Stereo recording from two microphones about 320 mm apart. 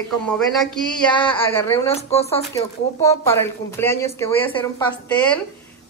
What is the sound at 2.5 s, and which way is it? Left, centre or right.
Speech, centre.